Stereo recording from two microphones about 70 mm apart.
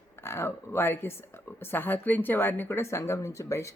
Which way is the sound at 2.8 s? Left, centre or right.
Left.